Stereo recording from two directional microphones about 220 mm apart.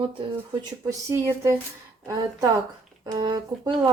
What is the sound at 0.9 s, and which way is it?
Speech, 15° right (ahead or behind).